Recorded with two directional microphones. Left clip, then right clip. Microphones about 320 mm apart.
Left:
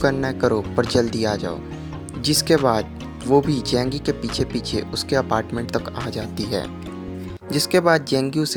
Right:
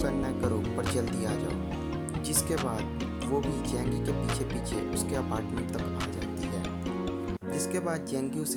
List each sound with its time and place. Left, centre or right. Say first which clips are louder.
0.0 s speech: left 11 dB; right
7.5 s speech: left 16 dB; right